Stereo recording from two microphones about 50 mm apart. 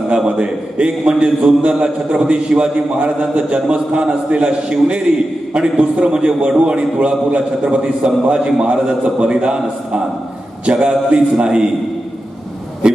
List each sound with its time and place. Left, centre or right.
0.1 s a man's voice: right